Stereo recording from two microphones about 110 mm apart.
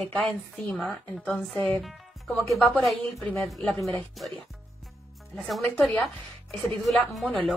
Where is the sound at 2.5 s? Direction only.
Centre (ahead or behind).